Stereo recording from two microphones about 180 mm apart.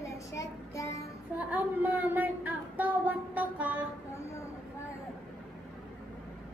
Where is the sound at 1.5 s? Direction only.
10° right (ahead or behind).